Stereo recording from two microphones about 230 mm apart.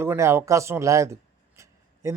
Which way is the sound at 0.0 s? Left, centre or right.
Centre.